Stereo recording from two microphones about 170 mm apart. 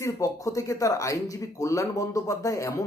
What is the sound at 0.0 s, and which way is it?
Speech, 20° left (ahead or behind).